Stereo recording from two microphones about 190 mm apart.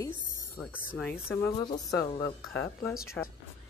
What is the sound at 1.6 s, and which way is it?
Speech, 25° left (ahead or behind).